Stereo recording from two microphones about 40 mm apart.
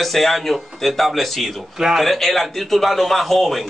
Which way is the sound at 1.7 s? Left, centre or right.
Centre.